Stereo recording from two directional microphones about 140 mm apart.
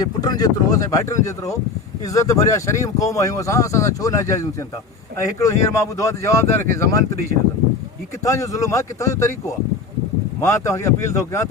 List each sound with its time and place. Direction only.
0.0 s speech: 30° left (ahead or behind)
8.2 s speech: 20° left (ahead or behind)
10.4 s speech: 20° left (ahead or behind)